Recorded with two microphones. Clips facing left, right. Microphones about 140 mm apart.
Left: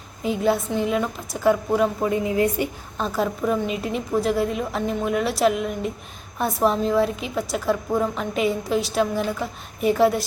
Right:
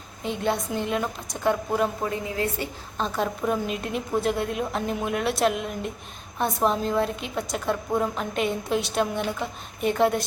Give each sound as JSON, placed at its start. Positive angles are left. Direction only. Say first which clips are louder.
{"t": 0.2, "sound": "a woman's voice", "louder": "left 5 dB", "side_deg": 5}
{"t": 2.0, "sound": "a woman's voice", "louder": "left 7 dB", "side_deg": 20}
{"t": 3.0, "sound": "a woman's voice", "louder": "left 3 dB", "side_deg": 0}